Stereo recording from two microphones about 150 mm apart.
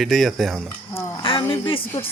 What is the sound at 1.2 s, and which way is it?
Speech, 35° left (ahead or behind).